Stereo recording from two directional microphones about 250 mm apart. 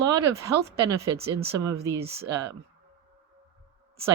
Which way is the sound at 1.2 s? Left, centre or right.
Right.